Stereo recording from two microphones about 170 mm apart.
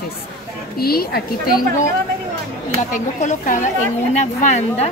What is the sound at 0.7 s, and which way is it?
A woman's voice, 65° left (ahead or behind).